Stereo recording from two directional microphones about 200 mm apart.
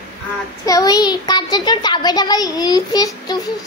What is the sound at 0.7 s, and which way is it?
A child's voice, 20° left (ahead or behind).